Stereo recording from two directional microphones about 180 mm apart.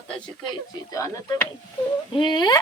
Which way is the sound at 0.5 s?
20° left (ahead or behind).